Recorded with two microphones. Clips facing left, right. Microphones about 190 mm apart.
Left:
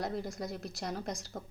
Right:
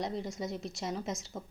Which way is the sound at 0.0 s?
Centre (ahead or behind).